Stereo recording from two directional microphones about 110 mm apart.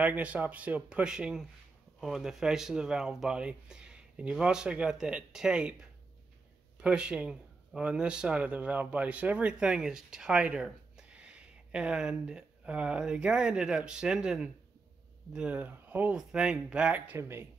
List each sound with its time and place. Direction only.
0.0 s speech: 15° right (ahead or behind)
17.2 s speech: 25° right (ahead or behind)